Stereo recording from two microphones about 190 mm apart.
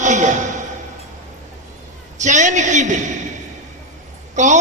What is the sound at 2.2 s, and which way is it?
Speech, 40° right (ahead or behind).